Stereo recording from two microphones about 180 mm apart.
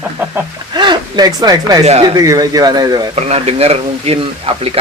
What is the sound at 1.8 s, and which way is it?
Speech, 35° right (ahead or behind).